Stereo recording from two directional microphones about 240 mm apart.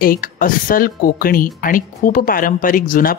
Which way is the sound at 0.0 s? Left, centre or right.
Left.